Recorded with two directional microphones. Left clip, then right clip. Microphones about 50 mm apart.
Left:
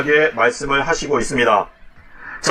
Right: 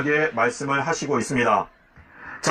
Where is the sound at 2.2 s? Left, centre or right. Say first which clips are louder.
Left 4 dB; centre.